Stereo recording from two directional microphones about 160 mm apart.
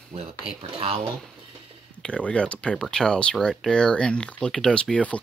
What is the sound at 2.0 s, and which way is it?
Speech, 5° left (ahead or behind).